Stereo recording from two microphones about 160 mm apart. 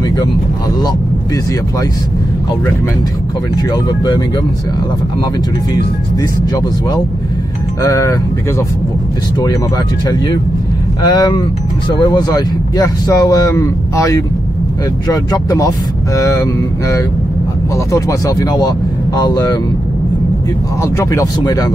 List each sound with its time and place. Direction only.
3.7 s speech: 25° left (ahead or behind)
7.8 s speech: 20° left (ahead or behind)
10.0 s speech: 25° left (ahead or behind)
20.8 s speech: 20° left (ahead or behind)